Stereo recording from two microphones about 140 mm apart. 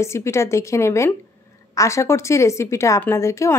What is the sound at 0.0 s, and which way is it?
A woman's voice, 20° left (ahead or behind).